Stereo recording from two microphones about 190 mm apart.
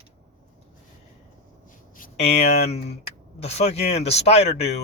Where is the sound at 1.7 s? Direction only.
45° left (ahead or behind).